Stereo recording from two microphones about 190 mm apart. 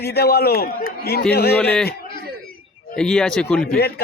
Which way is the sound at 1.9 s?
50° left (ahead or behind).